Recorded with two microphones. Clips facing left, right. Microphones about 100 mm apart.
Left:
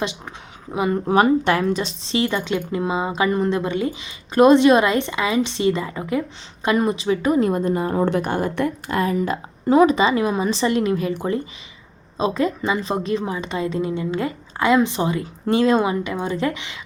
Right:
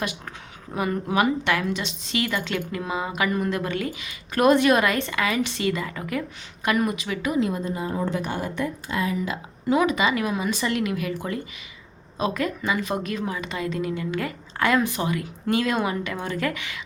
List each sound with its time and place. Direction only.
0.7 s a woman's voice: 20° left (ahead or behind)
1.0 s a woman's voice: 35° left (ahead or behind)